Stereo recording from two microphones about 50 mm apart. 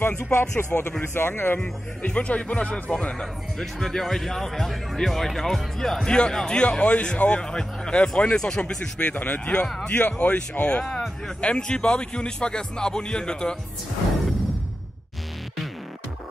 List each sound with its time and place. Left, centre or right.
0.0 s speech: left
1.6 s speech: left
3.5 s speech: centre
6.0 s speech: centre
9.1 s speech: left
9.8 s speech: left